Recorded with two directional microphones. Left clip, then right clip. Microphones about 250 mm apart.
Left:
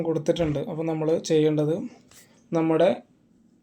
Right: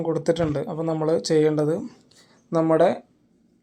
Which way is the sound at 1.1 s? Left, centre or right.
Right.